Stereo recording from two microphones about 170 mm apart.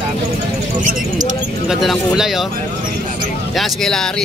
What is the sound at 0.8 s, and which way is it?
Speech, 50° right (ahead or behind).